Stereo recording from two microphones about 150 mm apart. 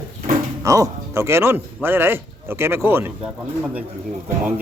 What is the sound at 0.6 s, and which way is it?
Speech, 20° right (ahead or behind).